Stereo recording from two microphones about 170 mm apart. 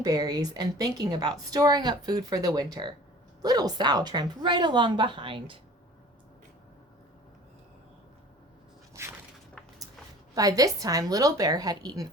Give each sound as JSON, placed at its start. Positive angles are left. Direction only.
{"t": 0.0, "sound": "a woman's voice", "side_deg": -20}
{"t": 9.0, "sound": "a sound", "side_deg": -15}
{"t": 10.3, "sound": "a woman's voice", "side_deg": -20}